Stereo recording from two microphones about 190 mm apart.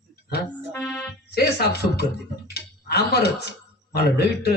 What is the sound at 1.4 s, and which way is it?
A man's voice, 60° left (ahead or behind).